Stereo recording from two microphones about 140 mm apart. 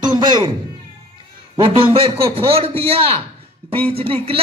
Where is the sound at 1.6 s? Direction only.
40° right (ahead or behind).